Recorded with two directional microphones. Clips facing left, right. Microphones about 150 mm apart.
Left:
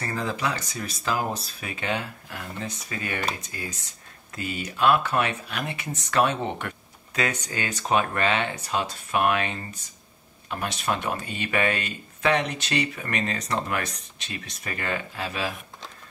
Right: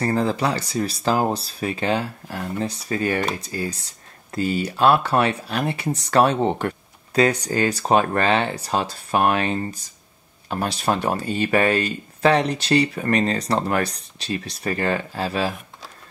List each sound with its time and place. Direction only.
0.0 s speech: 35° right (ahead or behind)